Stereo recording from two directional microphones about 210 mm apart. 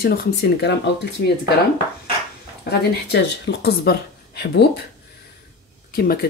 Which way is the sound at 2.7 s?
50° left (ahead or behind).